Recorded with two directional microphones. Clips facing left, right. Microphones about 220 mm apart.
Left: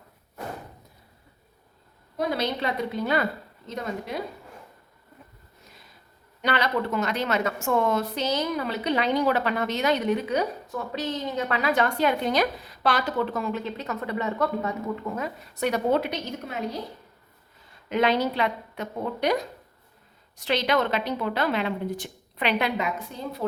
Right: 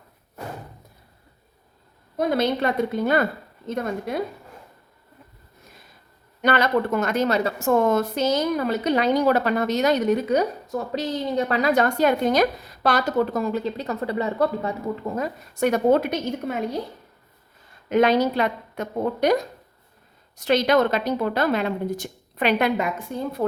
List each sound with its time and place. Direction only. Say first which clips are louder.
2.1 s a woman's voice: right 5 dB; 50° right (ahead or behind)
6.4 s a woman's voice: right 5 dB; 50° right (ahead or behind)
17.8 s a woman's voice: right 5 dB; 45° right (ahead or behind)